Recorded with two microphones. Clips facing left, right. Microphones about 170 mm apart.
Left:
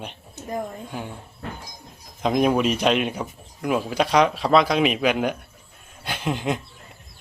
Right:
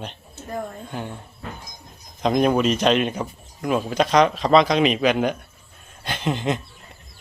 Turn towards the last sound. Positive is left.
turn(degrees=10)  # may be behind; listen again after turning